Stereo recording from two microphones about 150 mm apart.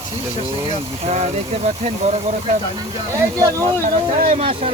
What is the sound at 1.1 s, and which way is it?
Speech, 45° right (ahead or behind).